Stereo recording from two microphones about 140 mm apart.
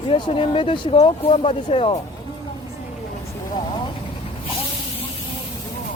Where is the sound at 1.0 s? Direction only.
45° left (ahead or behind).